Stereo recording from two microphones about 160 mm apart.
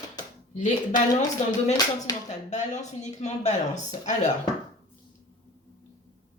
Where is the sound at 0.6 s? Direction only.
50° left (ahead or behind).